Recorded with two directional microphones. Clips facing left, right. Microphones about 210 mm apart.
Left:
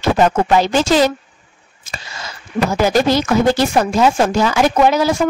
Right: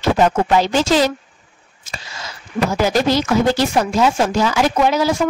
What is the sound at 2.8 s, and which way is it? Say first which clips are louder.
Speech: left 2 dB; 55° left (ahead or behind).